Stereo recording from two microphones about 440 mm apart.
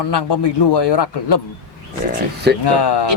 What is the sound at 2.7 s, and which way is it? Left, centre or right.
Speech, left.